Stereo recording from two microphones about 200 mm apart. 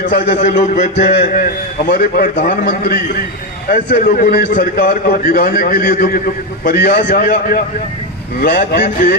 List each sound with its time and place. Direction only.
0.3 s a man's voice: 30° left (ahead or behind); by 9.1 s 55° left (ahead or behind)